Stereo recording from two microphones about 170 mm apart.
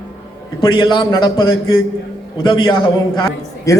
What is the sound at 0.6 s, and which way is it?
A man's voice, 25° left (ahead or behind).